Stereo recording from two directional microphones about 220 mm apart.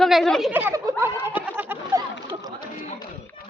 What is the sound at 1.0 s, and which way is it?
Goat, 10° right (ahead or behind).